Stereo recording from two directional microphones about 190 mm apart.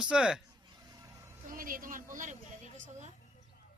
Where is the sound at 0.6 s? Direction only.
20° right (ahead or behind).